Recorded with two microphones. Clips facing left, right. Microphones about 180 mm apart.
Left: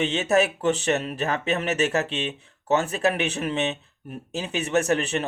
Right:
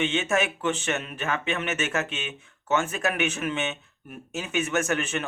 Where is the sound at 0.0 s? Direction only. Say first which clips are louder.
Left 4 dB; 35° left (ahead or behind).